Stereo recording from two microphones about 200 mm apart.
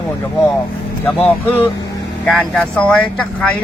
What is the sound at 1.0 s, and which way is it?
Speech, 10° left (ahead or behind).